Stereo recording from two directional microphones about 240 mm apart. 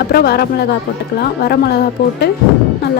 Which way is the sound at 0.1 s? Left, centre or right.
Left.